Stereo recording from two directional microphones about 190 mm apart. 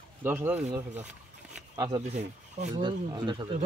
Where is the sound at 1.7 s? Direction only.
20° right (ahead or behind).